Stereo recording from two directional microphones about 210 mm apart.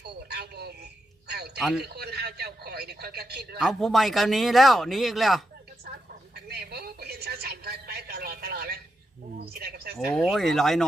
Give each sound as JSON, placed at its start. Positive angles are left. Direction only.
{"t": 0.0, "sound": "a sound", "side_deg": -50}
{"t": 1.5, "sound": "speech", "side_deg": -5}
{"t": 1.8, "sound": "speech", "side_deg": -50}
{"t": 3.6, "sound": "speech", "side_deg": 0}
{"t": 6.3, "sound": "a sound", "side_deg": -50}
{"t": 9.4, "sound": "speech", "side_deg": -50}
{"t": 10.1, "sound": "speech", "side_deg": 0}